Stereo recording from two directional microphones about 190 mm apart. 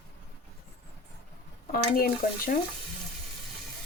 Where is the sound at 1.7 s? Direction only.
50° left (ahead or behind).